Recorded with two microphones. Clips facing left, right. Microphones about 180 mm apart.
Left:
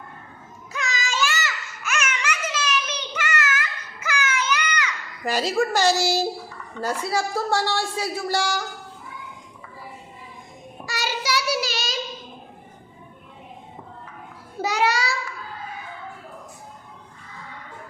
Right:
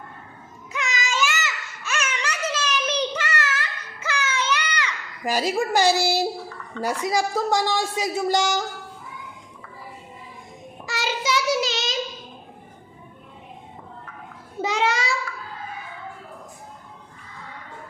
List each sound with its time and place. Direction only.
0.7 s child singing: 20° right (ahead or behind)
1.8 s child singing: 30° right (ahead or behind)
5.2 s speech: 10° right (ahead or behind)
10.8 s child singing: 25° right (ahead or behind)
14.6 s a sound: 25° right (ahead or behind)